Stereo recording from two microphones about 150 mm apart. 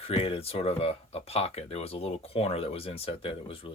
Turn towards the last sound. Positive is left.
turn(degrees=40)  # may be behind; listen again after turning